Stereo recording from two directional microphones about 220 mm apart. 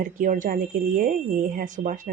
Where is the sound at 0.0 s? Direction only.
35° right (ahead or behind).